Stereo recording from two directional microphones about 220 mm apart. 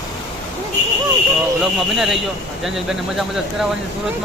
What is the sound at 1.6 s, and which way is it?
Speech, centre (ahead or behind).